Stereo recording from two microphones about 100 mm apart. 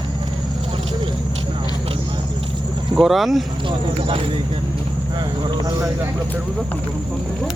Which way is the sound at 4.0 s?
65° right (ahead or behind).